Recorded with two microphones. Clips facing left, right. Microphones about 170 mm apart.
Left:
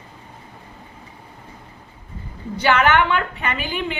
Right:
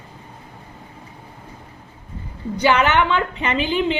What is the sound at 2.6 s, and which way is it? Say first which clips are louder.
A woman's voice: even; 15° right (ahead or behind).